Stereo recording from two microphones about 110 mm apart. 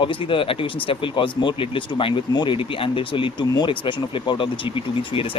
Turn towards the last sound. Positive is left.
turn(degrees=50)  # may be behind; listen again after turning